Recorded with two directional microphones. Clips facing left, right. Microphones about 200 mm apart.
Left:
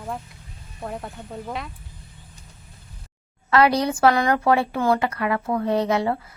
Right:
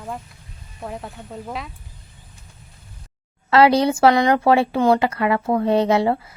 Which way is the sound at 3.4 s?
25° right (ahead or behind).